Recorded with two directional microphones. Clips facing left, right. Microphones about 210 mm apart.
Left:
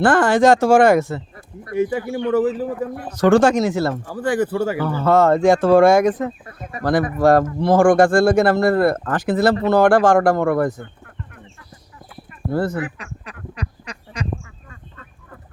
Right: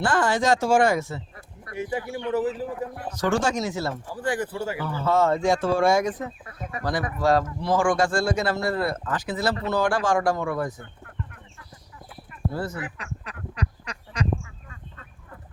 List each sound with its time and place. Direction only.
0.0 s speech: 55° left (ahead or behind)
4.4 s speech: 80° left; by 10.8 s 55° left (ahead or behind)
12.5 s speech: 60° left (ahead or behind)
13.8 s duck: 10° left (ahead or behind)